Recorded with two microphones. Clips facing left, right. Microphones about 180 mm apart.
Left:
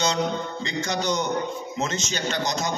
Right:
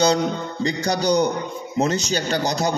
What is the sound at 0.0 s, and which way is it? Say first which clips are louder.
Speech: right 5 dB; 35° right (ahead or behind).